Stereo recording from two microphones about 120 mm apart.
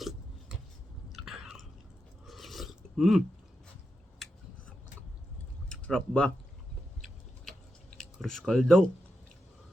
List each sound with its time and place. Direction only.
1.1 s chewing: 5° right (ahead or behind)
2.2 s filing: centre (ahead or behind)
5.6 s speech: 10° left (ahead or behind)
7.9 s speech: 5° left (ahead or behind)